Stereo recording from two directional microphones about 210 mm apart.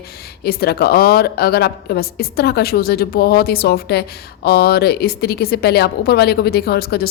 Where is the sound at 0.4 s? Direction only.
50° left (ahead or behind).